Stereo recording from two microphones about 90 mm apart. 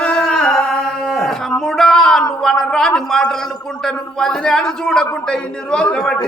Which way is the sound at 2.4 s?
5° left (ahead or behind).